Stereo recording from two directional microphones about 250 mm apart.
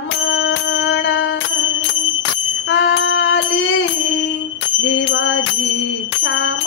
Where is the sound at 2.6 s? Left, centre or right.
Left.